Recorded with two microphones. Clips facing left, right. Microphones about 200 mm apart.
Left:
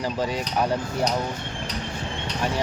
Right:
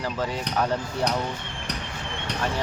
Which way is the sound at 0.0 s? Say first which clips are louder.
Left 2 dB; 15° left (ahead or behind).